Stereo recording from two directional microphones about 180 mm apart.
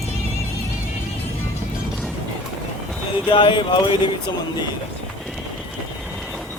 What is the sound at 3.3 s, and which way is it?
Speech, 25° left (ahead or behind).